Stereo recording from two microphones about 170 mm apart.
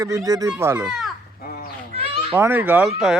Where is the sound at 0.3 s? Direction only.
20° right (ahead or behind).